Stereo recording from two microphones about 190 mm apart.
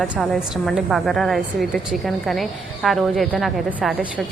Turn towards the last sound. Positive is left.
turn(degrees=0)  # may be behind; listen again after turning